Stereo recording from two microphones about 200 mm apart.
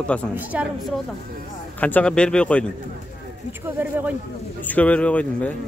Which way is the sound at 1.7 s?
10° left (ahead or behind).